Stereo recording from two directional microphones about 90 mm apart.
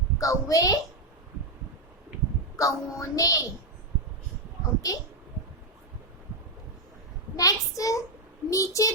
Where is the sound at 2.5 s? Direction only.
40° left (ahead or behind).